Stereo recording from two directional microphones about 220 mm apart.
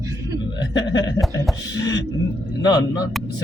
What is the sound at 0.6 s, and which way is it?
A man's voice, 20° left (ahead or behind).